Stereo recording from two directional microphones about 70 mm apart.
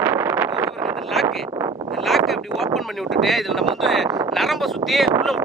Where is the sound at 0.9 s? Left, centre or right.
Centre.